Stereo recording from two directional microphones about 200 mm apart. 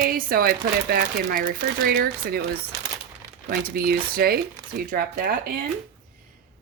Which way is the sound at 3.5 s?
50° right (ahead or behind).